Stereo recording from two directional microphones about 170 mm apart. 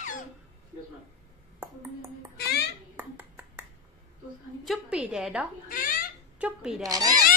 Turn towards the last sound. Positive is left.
turn(degrees=-20)  # may be behind; listen again after turning